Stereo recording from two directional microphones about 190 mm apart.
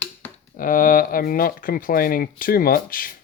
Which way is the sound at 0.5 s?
45° left (ahead or behind).